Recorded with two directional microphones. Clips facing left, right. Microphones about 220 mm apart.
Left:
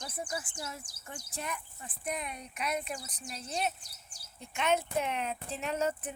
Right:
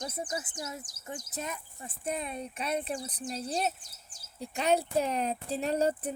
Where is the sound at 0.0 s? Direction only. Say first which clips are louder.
Right 3 dB; 20° right (ahead or behind).